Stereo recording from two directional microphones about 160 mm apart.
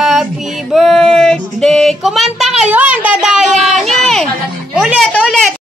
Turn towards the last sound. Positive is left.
turn(degrees=0)  # may be behind; listen again after turning